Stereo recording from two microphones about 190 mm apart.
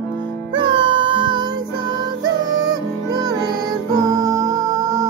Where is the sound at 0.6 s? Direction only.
25° right (ahead or behind).